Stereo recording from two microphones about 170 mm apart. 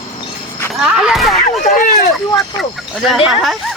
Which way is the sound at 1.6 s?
55° left (ahead or behind).